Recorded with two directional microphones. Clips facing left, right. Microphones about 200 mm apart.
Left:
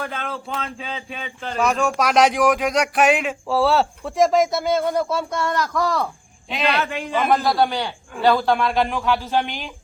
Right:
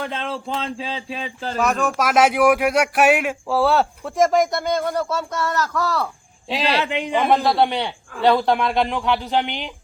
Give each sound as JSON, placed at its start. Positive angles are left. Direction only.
{"t": 0.0, "sound": "speech", "side_deg": -25}
{"t": 1.5, "sound": "speech", "side_deg": 0}
{"t": 6.5, "sound": "speech", "side_deg": -35}
{"t": 6.8, "sound": "a man's voice", "side_deg": -20}